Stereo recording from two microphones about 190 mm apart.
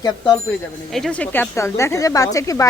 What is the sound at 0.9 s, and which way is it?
Speech, centre (ahead or behind).